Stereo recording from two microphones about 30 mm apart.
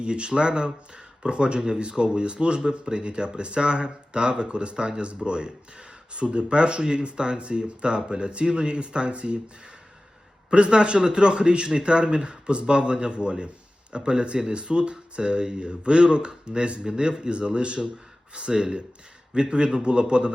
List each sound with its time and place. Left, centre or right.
0.0 s speech: right
10.5 s speech: right